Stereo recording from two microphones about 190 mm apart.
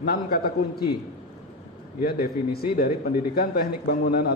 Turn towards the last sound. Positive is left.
turn(degrees=55)  # may be behind; listen again after turning